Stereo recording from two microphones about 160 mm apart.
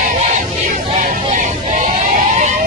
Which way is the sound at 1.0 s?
55° right (ahead or behind).